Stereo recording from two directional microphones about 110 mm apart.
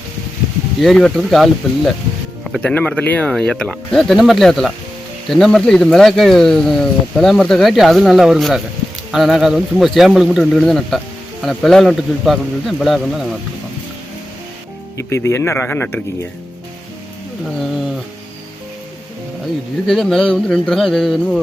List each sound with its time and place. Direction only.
0.8 s speech: 5° left (ahead or behind)
14.9 s speech: 25° left (ahead or behind)
19.9 s speech: 5° left (ahead or behind)